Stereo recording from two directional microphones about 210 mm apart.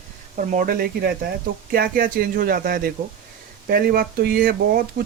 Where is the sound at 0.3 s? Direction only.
40° right (ahead or behind).